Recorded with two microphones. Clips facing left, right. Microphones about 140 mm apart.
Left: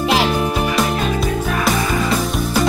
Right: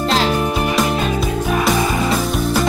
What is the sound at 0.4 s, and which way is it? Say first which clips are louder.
Music: even; centre (ahead or behind).